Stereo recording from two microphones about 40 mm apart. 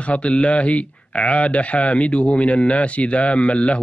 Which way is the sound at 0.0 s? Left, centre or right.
Left.